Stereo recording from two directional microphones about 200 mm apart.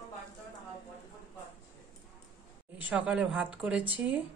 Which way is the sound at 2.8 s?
5° right (ahead or behind).